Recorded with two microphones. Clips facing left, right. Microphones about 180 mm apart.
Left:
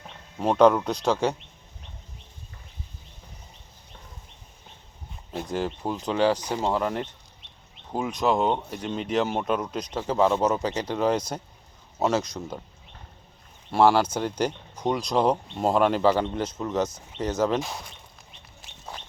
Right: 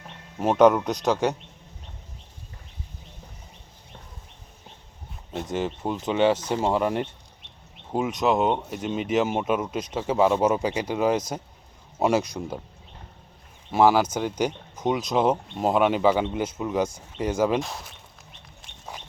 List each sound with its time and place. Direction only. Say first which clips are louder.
0.3 s speech: right 1 dB; 5° right (ahead or behind)
5.3 s speech: right 1 dB; centre (ahead or behind)
7.9 s speech: right 2 dB; 5° right (ahead or behind)
13.7 s speech: right 1 dB; 5° right (ahead or behind)
17.6 s speech: right 1 dB; centre (ahead or behind)
18.9 s a sound: even; 15° right (ahead or behind)